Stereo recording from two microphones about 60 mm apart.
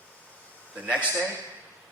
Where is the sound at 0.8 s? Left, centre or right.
Right.